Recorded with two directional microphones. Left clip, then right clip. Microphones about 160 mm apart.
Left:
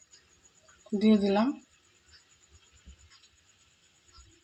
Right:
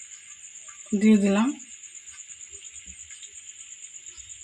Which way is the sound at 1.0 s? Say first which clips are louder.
Right 3 dB; 50° right (ahead or behind).